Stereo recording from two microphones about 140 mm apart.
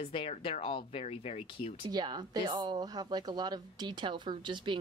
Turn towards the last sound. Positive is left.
turn(degrees=-35)  # may be behind; listen again after turning